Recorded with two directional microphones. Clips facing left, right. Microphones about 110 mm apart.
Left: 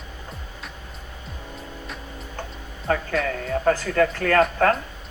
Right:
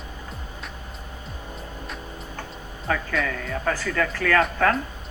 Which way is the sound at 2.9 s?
40° left (ahead or behind).